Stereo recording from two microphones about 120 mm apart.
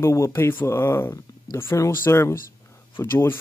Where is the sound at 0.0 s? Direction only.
25° left (ahead or behind).